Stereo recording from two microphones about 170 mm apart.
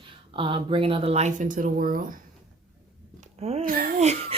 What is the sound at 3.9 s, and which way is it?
Speech, 40° right (ahead or behind).